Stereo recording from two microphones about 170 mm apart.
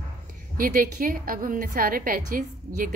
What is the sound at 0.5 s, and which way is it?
A woman's voice, 55° right (ahead or behind).